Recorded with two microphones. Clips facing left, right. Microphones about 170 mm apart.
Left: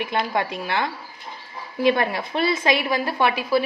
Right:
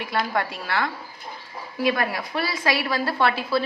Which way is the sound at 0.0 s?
20° left (ahead or behind).